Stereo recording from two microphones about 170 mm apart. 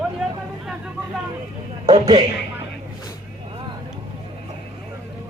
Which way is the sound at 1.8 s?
30° right (ahead or behind).